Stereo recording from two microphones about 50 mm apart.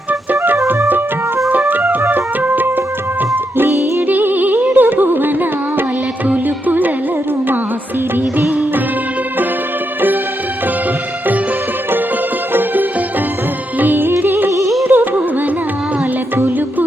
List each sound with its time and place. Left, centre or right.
1.5 s music: right
4.1 s carnatic music: right
6.2 s music: right
8.1 s music: right
12.5 s music: right
14.5 s music: right
14.8 s carnatic music: right
16.3 s music: right